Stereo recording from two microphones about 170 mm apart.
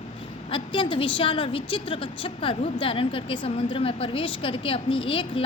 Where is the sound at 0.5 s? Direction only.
30° left (ahead or behind).